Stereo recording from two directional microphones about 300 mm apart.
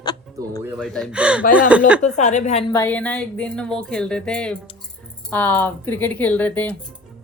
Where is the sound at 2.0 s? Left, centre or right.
Left.